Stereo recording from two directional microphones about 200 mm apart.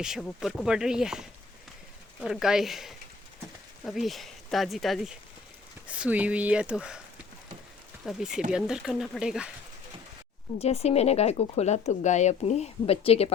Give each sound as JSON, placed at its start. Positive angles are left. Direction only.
{"t": 0.0, "sound": "speech", "side_deg": 0}
{"t": 8.0, "sound": "speech", "side_deg": 0}
{"t": 10.6, "sound": "speech", "side_deg": 30}